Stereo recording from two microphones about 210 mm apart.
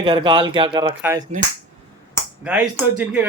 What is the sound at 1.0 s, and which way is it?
Speech, 10° right (ahead or behind).